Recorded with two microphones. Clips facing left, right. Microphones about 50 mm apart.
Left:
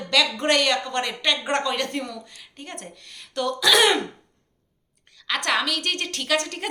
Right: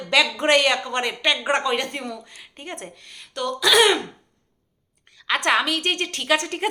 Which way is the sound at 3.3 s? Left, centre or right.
Centre.